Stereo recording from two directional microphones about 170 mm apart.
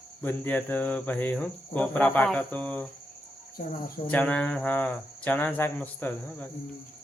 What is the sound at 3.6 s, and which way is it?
Speech, 55° left (ahead or behind).